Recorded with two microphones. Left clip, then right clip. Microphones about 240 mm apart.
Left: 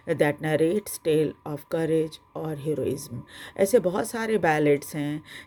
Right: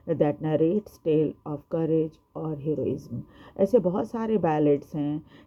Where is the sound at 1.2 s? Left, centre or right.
Left.